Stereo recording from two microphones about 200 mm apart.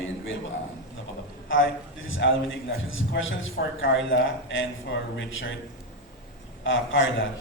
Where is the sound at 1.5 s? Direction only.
75° left (ahead or behind).